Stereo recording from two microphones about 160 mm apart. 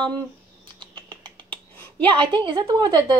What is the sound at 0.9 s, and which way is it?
Typing, 30° right (ahead or behind).